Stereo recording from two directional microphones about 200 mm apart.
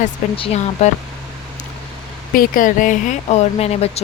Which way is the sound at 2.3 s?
45° left (ahead or behind).